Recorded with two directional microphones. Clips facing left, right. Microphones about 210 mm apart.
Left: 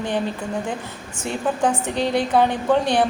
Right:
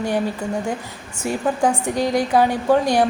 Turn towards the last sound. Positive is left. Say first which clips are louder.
# right 2 dB
turn(degrees=-10)  # may be behind; listen again after turning